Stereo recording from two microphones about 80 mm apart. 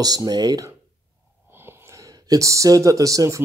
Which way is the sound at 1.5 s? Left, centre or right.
Right.